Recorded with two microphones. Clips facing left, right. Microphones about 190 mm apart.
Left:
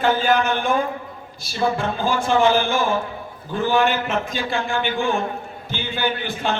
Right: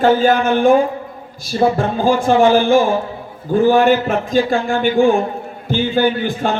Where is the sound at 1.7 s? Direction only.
40° right (ahead or behind).